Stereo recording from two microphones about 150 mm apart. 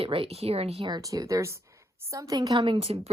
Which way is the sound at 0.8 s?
25° right (ahead or behind).